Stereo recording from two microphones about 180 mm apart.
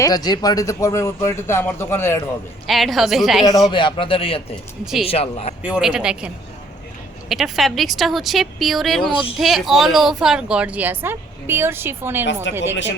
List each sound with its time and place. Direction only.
0.0 s speech: 20° left (ahead or behind)
2.6 s speech: centre (ahead or behind)
3.7 s a man's voice: 30° left (ahead or behind)
5.6 s speech: 5° right (ahead or behind)
12.2 s speech: 90° left